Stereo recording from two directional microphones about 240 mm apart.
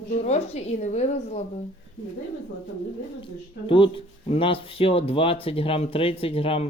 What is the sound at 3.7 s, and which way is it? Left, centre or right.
Speech, left.